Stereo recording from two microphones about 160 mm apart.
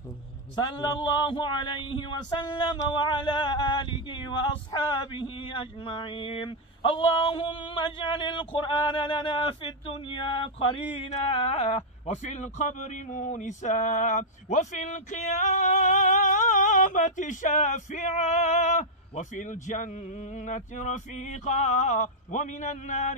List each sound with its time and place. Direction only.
0.6 s a man's voice: 25° left (ahead or behind); by 23.1 s 45° left (ahead or behind)